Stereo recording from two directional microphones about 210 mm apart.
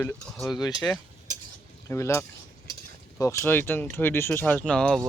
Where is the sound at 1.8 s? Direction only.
15° left (ahead or behind).